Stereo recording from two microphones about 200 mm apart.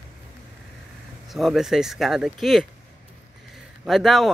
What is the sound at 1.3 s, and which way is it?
Speech, centre (ahead or behind).